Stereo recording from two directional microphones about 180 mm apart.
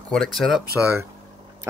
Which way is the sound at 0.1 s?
Centre (ahead or behind).